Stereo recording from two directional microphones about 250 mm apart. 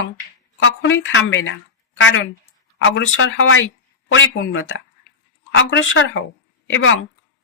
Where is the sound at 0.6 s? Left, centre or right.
Left.